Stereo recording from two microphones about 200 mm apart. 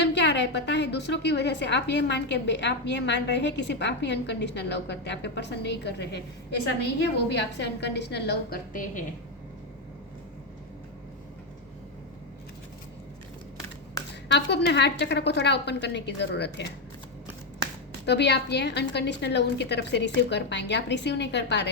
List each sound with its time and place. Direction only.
0.0 s a woman's voice: 60° left (ahead or behind)
7.3 s a woman's voice: 60° left (ahead or behind); by 9.0 s 40° left (ahead or behind)
14.3 s a woman's voice: 60° left (ahead or behind)
18.0 s a woman's voice: 60° left (ahead or behind)